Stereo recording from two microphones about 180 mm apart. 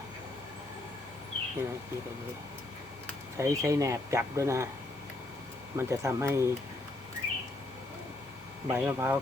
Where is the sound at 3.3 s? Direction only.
15° right (ahead or behind).